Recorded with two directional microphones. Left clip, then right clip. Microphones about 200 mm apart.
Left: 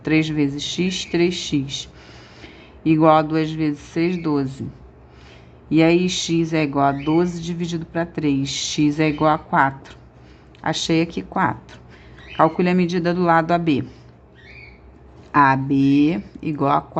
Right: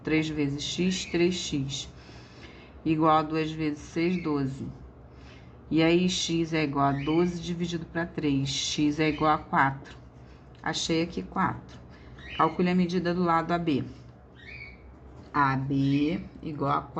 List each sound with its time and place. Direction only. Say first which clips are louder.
0.0 s speech: left 8 dB; 30° left (ahead or behind)
5.7 s speech: left 7 dB; 30° left (ahead or behind)
15.3 s speech: left 10 dB; 45° left (ahead or behind)